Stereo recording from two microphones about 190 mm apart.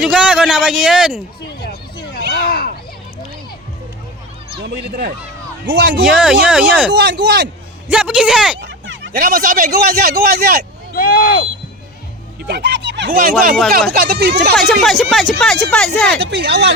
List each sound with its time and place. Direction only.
0.0 s a man's voice: 5° right (ahead or behind)
2.3 s a sound: 55° left (ahead or behind)
4.6 s speech: 60° right (ahead or behind)
6.0 s a man's voice: 5° right (ahead or behind)
6.9 s speech: 65° right (ahead or behind)
7.9 s a man's voice: 5° right (ahead or behind)
8.6 s a sound: 70° right (ahead or behind)
9.2 s a man's voice: 45° right (ahead or behind)
10.9 s speech: 55° left (ahead or behind)
12.5 s speech: 60° right (ahead or behind)
13.9 s a man's voice: 50° right (ahead or behind)
14.5 s a man's voice: centre (ahead or behind)
16.1 s speech: 60° right (ahead or behind)